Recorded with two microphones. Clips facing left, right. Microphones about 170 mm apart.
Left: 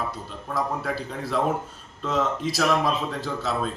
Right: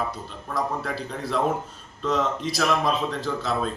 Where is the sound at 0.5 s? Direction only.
Centre (ahead or behind).